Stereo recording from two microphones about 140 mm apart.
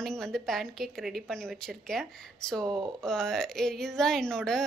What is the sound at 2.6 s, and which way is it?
Speech, 30° right (ahead or behind).